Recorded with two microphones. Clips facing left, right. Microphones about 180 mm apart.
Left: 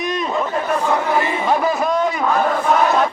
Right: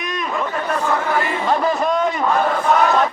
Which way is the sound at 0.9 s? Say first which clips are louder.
Left 1 dB; 15° left (ahead or behind).